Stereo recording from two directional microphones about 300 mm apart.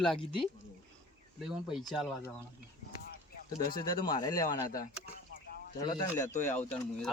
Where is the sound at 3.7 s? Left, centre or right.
Left.